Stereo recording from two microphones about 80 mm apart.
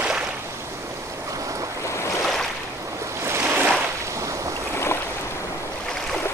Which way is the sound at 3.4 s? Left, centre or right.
Centre.